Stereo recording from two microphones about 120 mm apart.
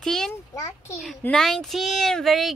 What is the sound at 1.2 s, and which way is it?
Speech, 5° left (ahead or behind).